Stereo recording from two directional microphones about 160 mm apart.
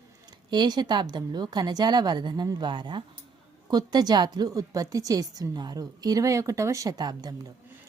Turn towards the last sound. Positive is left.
turn(degrees=-25)  # may be behind; listen again after turning